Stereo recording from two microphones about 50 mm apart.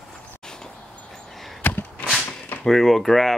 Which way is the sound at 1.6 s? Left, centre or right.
Left.